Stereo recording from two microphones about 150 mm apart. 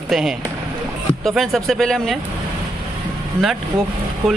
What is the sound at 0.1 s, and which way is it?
Speech, 5° right (ahead or behind).